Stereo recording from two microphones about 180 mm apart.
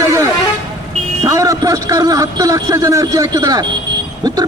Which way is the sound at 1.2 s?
20° right (ahead or behind).